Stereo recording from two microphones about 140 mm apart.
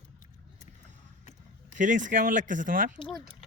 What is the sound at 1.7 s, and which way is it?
Speech, 65° right (ahead or behind).